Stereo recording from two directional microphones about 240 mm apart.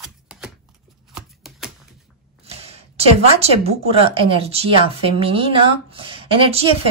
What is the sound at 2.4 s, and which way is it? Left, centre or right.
Speech, right.